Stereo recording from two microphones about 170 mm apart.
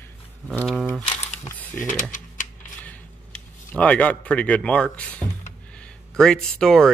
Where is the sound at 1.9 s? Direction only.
50° left (ahead or behind).